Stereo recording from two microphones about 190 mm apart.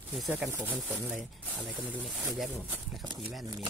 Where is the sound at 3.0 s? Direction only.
25° right (ahead or behind).